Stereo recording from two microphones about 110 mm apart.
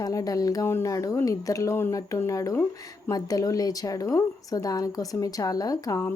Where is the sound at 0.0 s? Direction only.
30° left (ahead or behind).